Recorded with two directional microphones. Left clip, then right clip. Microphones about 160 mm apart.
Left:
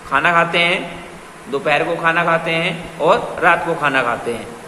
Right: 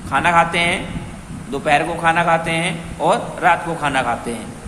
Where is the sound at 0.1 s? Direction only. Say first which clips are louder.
Left 1 dB; 15° right (ahead or behind).